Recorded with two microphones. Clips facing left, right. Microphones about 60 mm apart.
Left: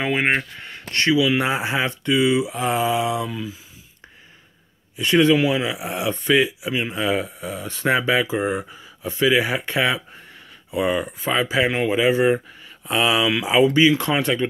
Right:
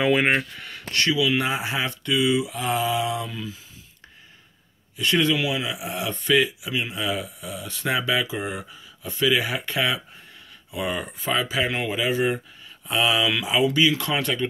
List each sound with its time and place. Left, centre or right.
0.0 s speech: left
1.1 s speech: centre
4.9 s speech: left
11.0 s speech: centre
11.3 s speech: left
13.1 s speech: left
13.5 s speech: left